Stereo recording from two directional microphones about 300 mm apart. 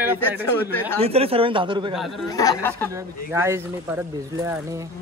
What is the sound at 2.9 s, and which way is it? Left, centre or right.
Speech, centre.